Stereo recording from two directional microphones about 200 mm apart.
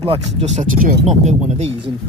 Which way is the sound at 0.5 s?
40° right (ahead or behind).